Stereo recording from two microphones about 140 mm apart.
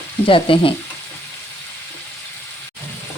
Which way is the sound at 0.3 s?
40° left (ahead or behind).